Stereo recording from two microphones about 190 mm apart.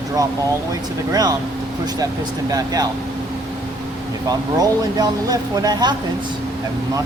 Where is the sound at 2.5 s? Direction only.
20° right (ahead or behind).